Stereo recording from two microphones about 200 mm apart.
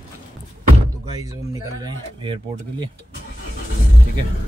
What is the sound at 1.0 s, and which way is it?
Speech, 20° right (ahead or behind).